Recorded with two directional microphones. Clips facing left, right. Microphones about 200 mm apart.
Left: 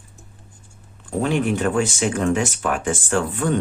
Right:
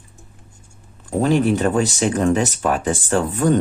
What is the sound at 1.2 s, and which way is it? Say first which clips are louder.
Speech: right 4 dB; 35° right (ahead or behind).